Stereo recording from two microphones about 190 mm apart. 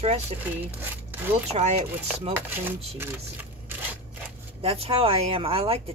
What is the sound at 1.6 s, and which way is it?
Speech, 35° right (ahead or behind).